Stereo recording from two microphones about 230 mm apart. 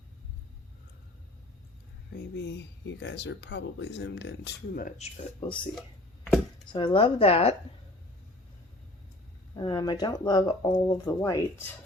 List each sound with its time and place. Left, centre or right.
3.0 s speech: left
6.7 s a woman's voice: left
9.6 s speech: centre